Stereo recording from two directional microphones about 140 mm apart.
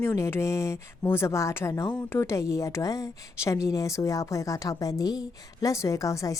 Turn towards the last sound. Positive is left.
turn(degrees=25)  # may be behind; listen again after turning